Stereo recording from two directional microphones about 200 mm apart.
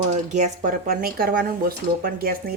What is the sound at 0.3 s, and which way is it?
Speech, 45° right (ahead or behind).